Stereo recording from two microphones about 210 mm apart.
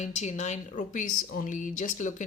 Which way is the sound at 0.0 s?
35° left (ahead or behind).